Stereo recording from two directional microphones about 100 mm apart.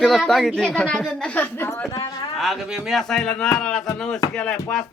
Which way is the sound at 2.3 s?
Centre (ahead or behind).